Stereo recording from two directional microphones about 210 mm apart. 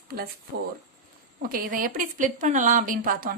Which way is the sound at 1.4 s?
45° right (ahead or behind).